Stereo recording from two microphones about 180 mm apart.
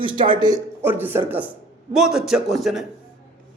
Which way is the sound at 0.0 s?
25° right (ahead or behind).